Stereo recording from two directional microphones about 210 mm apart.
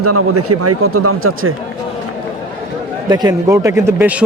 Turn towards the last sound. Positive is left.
turn(degrees=-10)  # may be behind; listen again after turning